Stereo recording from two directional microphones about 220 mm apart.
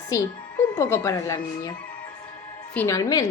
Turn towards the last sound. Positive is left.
turn(degrees=15)  # may be behind; listen again after turning